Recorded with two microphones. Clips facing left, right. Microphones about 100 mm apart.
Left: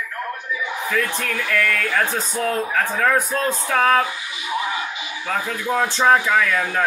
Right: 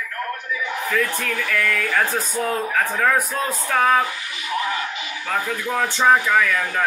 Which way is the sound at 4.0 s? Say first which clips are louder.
Left 1 dB; 15° left (ahead or behind).